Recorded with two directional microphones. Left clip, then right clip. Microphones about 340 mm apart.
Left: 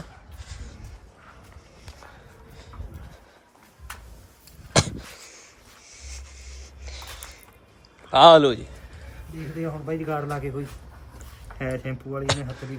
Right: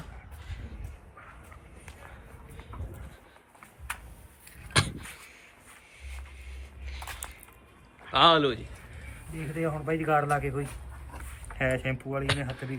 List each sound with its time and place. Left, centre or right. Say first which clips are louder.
4.7 s a sound: left 5 dB; centre
6.0 s music: left 6 dB; centre
8.1 s a man's voice: left 9 dB; centre